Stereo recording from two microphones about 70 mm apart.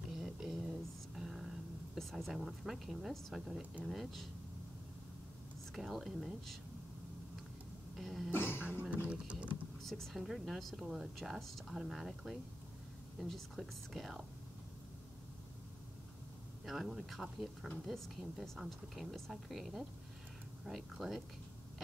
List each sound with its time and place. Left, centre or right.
0.1 s a sound: centre
1.1 s speech: centre
5.8 s speech: centre
8.0 s speech: centre
8.3 s cough: left
9.0 s speech: centre
9.8 s speech: centre
16.6 s speech: centre